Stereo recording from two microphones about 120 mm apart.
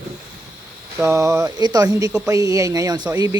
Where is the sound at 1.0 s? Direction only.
25° right (ahead or behind).